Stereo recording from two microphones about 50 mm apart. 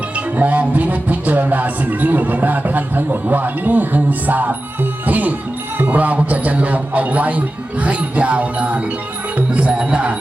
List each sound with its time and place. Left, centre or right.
0.3 s music: right
5.8 s a man's voice: right